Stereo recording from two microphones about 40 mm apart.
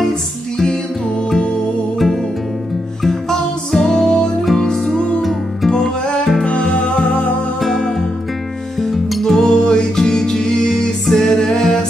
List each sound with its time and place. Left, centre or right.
2.0 s music: centre; by 5.2 s left
5.2 s music: centre
7.6 s music: centre
9.2 s music: centre